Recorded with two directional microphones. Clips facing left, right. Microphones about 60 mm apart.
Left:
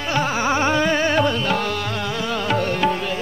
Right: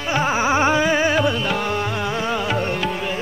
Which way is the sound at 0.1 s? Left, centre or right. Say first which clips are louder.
Right 2 dB; centre.